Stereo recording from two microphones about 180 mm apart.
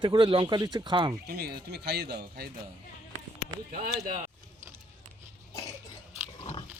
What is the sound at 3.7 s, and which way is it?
Speech, 50° right (ahead or behind).